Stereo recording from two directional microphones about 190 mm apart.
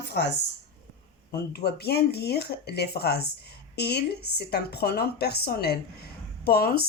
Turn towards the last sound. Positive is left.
turn(degrees=55)  # may be behind; listen again after turning